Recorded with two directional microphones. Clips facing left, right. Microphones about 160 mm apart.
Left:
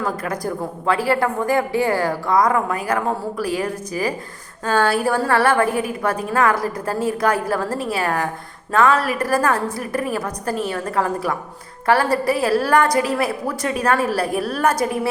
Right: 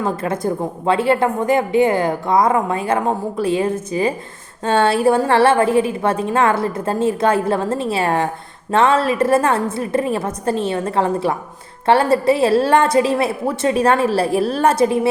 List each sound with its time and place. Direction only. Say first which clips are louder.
0.0 s a woman's voice: right 4 dB; 25° right (ahead or behind)